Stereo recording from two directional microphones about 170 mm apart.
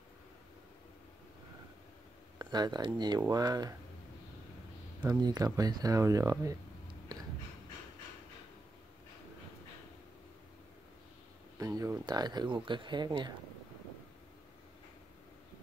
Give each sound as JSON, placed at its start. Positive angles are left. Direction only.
{"t": 2.3, "sound": "speech", "side_deg": -25}
{"t": 5.0, "sound": "speech", "side_deg": -25}
{"t": 11.5, "sound": "speech", "side_deg": -20}